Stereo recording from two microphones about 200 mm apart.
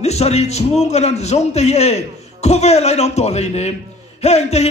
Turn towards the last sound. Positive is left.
turn(degrees=35)  # may be behind; listen again after turning